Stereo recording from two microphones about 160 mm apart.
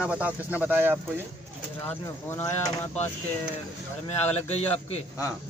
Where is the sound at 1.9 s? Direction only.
15° left (ahead or behind).